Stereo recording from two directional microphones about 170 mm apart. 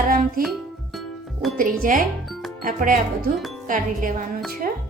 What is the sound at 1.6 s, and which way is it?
Speech, 55° right (ahead or behind).